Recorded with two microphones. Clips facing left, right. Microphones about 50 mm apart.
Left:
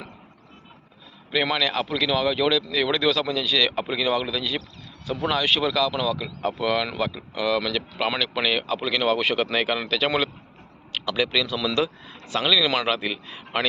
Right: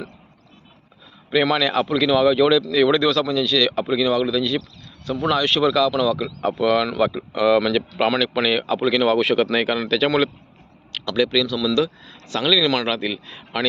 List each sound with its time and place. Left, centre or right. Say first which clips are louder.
1.3 s speech: right 5 dB; centre
7.0 s speech: right 7 dB; centre
8.1 s speech: right 4 dB; centre
10.9 s speech: right 4 dB; centre
11.5 s speech: right 4 dB; left
12.3 s speech: right 3 dB; centre